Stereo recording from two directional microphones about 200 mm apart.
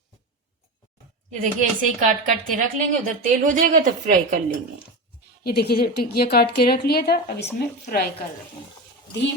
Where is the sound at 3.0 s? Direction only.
40° right (ahead or behind).